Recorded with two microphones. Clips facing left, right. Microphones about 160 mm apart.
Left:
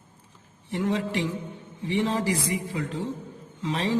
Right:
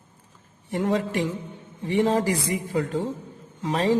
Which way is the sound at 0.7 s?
45° right (ahead or behind).